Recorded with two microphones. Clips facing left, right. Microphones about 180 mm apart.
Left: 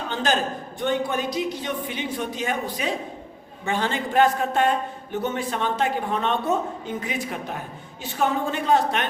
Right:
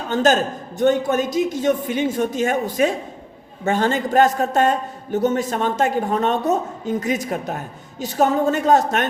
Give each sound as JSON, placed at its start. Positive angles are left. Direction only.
{"t": 0.1, "sound": "a man's voice", "side_deg": -45}